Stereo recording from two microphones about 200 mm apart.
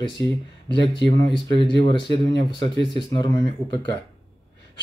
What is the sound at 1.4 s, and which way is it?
Speech, 20° left (ahead or behind).